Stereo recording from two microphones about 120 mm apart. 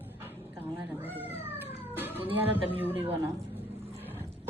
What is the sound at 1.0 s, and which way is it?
Cat, 15° right (ahead or behind).